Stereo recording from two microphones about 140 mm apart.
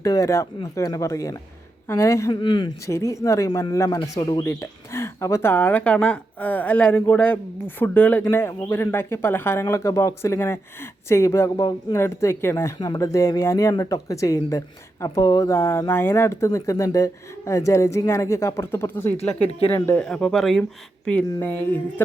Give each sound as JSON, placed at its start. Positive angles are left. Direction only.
{"t": 0.0, "sound": "speech", "side_deg": 25}
{"t": 2.3, "sound": "speech", "side_deg": 35}
{"t": 2.8, "sound": "speech", "side_deg": 20}
{"t": 20.1, "sound": "speech", "side_deg": 5}